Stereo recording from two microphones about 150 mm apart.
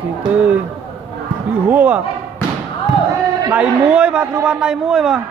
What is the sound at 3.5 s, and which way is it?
A man's voice, 10° right (ahead or behind).